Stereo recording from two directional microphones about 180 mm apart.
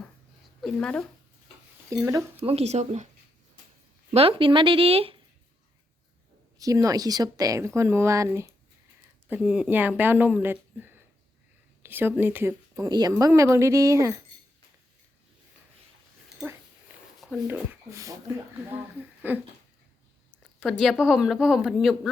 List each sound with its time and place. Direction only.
0.6 s speech: 5° left (ahead or behind)
1.9 s a woman's voice: 15° right (ahead or behind)
2.4 s speech: 35° right (ahead or behind)
4.1 s speech: 30° right (ahead or behind)
6.6 s a woman's voice: 20° right (ahead or behind)
9.3 s a woman's voice: 5° right (ahead or behind)
17.5 s a woman's voice: 15° right (ahead or behind)
19.2 s a woman's voice: 10° right (ahead or behind)
20.6 s speech: centre (ahead or behind)